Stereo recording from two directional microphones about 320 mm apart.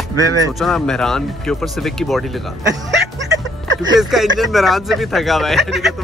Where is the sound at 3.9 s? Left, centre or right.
Centre.